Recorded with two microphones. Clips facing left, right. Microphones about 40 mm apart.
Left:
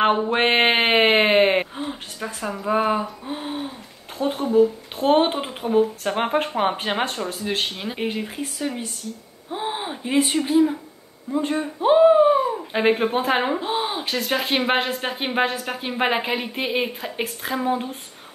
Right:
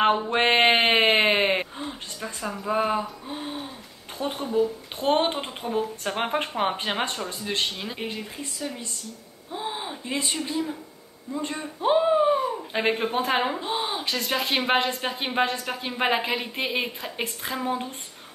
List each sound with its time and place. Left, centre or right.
0.0 s a sound: centre
1.9 s speech: centre; by 8.8 s left
9.5 s a sound: left
10.3 s speech: centre
11.3 s speech: left
11.8 s speech: centre